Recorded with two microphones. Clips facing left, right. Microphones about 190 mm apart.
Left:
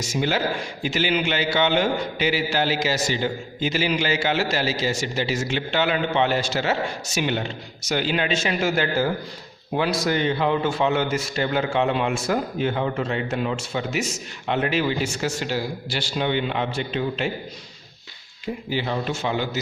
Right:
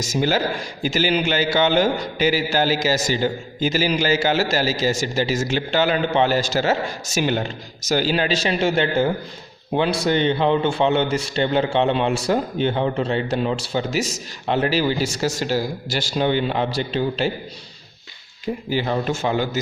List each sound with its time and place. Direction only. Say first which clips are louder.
0.0 s a man's voice: right 3 dB; 40° right (ahead or behind)
18.7 s a man's voice: right 3 dB; 45° right (ahead or behind)